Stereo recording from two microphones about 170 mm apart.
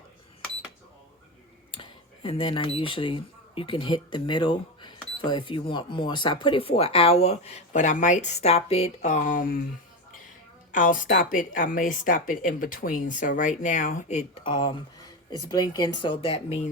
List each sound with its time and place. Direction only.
1.7 s speech: 30° left (ahead or behind); by 9.6 s 55° left (ahead or behind)
10.7 s speech: 50° left (ahead or behind)
14.5 s speech: 30° left (ahead or behind)